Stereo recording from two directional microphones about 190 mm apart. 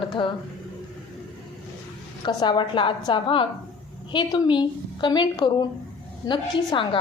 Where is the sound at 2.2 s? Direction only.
25° left (ahead or behind).